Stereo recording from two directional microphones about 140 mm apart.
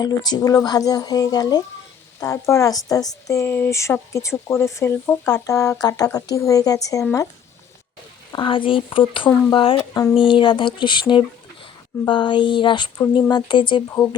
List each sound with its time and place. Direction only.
0.0 s speech: 30° left (ahead or behind)
8.3 s speech: 35° left (ahead or behind)